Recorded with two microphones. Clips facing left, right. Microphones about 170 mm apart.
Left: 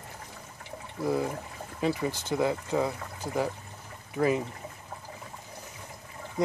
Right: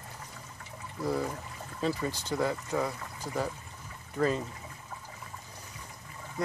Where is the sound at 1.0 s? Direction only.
10° left (ahead or behind).